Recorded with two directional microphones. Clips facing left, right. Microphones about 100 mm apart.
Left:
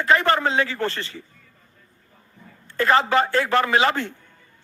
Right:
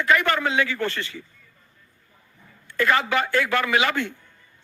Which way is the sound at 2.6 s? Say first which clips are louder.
Left 3 dB; 30° left (ahead or behind).